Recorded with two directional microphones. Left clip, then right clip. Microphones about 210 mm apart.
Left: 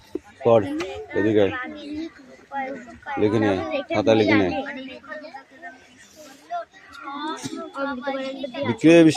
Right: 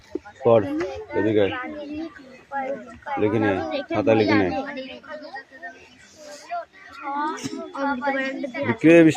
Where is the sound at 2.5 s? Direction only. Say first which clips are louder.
Right 1 dB; 55° left (ahead or behind).